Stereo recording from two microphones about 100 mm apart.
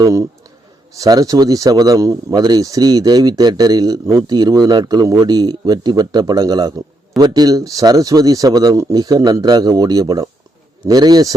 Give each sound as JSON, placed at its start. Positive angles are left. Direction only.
{"t": 0.0, "sound": "speech", "side_deg": -35}